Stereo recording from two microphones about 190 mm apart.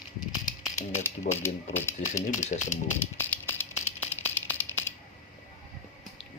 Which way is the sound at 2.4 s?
40° left (ahead or behind).